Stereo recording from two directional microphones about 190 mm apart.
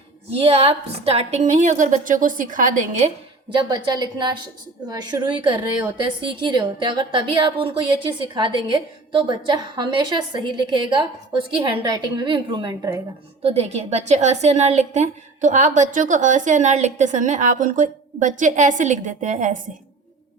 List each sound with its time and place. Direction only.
0.3 s a woman's voice: 30° right (ahead or behind)
3.5 s a woman's voice: 25° right (ahead or behind)
13.4 s a woman's voice: 35° right (ahead or behind)